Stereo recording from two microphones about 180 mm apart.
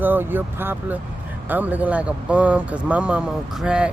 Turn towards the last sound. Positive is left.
turn(degrees=-5)  # may be behind; listen again after turning